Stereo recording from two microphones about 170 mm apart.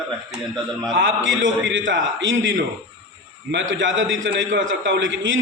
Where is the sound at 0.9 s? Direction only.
90° right.